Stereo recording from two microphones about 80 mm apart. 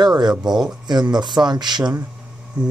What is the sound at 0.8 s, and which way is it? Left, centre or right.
Speech, right.